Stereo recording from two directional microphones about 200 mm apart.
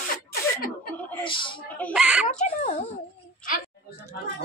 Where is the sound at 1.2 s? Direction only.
25° left (ahead or behind).